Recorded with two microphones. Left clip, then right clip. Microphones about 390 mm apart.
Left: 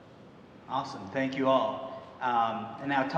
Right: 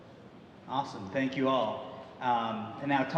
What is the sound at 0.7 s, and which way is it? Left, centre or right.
A man's voice, right.